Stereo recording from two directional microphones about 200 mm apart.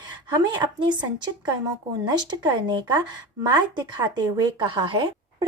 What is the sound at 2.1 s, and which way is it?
Female singing, 20° right (ahead or behind).